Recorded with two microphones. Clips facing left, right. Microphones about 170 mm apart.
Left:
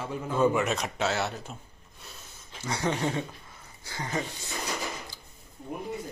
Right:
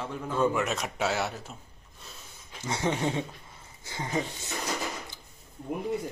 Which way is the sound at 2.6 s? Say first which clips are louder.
Even; 20° right (ahead or behind).